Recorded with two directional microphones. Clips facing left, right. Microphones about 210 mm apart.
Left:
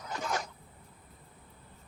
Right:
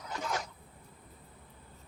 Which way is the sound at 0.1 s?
45° left (ahead or behind).